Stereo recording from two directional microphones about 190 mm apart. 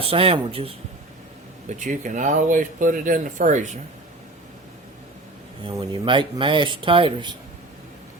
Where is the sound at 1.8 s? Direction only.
40° right (ahead or behind).